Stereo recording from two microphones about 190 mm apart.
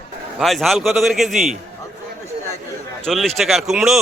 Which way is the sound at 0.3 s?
Centre (ahead or behind).